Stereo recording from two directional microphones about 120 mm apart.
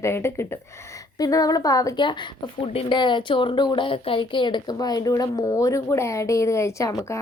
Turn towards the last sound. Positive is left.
turn(degrees=25)  # may be behind; listen again after turning